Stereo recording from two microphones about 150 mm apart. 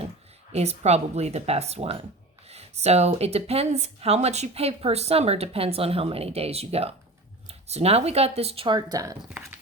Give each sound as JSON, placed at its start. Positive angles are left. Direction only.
{"t": 0.5, "sound": "speech", "side_deg": -45}